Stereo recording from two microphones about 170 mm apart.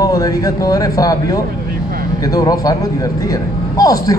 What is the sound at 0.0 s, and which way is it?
A man's voice, 20° left (ahead or behind).